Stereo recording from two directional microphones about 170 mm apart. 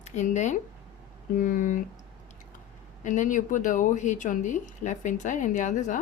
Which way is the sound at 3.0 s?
45° left (ahead or behind).